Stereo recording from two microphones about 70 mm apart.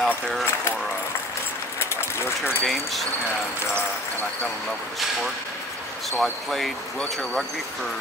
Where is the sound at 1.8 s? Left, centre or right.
Left.